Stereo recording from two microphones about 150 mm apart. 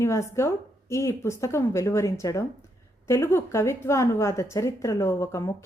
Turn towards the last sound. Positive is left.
turn(degrees=20)  # may be behind; listen again after turning